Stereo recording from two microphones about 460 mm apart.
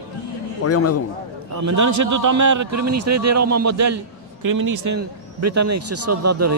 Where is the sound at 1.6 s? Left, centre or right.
Right.